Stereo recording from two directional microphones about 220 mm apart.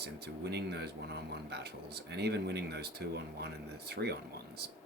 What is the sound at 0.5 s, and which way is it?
Speech, 50° right (ahead or behind).